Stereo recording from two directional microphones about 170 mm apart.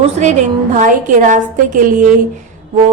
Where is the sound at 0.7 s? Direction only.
50° right (ahead or behind).